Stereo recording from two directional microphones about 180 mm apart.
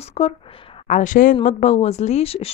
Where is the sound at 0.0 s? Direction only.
35° left (ahead or behind).